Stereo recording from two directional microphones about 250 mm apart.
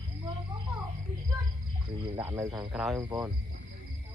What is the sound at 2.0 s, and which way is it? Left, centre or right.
Speech, centre.